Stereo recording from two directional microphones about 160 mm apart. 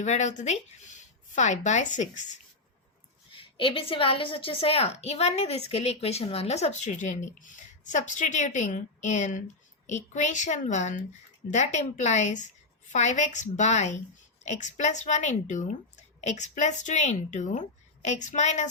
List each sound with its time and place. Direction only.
0.0 s a woman's voice: 50° left (ahead or behind)
3.3 s a woman's voice: 35° left (ahead or behind)